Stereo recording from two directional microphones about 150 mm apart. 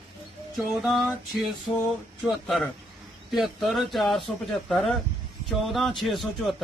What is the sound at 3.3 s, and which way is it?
A man's voice, centre (ahead or behind).